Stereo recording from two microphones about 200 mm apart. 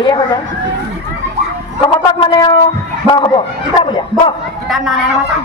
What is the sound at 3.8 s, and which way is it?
Speech, 25° left (ahead or behind).